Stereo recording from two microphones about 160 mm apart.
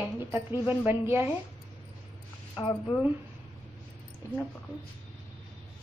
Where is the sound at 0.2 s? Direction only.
15° right (ahead or behind).